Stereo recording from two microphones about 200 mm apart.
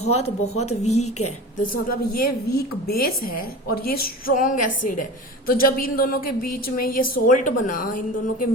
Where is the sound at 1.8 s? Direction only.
50° left (ahead or behind).